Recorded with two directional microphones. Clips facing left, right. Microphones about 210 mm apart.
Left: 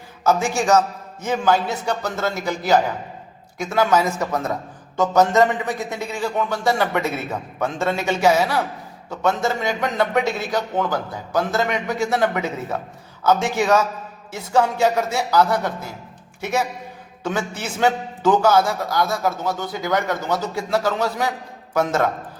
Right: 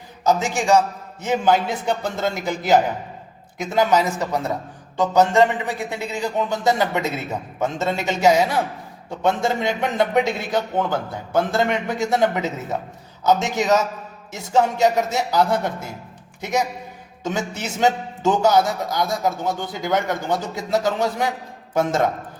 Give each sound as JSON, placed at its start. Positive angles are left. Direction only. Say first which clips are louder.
{"t": 0.3, "sound": "a man's voice", "louder": "even", "side_deg": -15}